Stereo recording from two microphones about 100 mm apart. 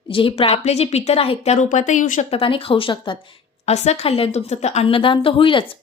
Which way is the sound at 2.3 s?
65° left (ahead or behind).